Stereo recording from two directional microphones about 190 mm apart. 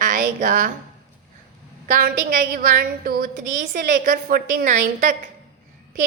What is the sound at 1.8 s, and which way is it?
A woman's voice, 45° right (ahead or behind).